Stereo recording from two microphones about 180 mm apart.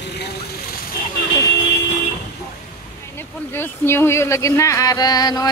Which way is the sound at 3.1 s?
15° left (ahead or behind).